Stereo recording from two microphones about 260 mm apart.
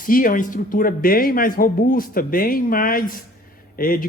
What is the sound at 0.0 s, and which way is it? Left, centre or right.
Speech, left.